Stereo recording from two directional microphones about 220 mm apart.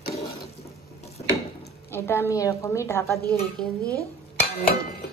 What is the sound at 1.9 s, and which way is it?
A woman's voice, 10° left (ahead or behind).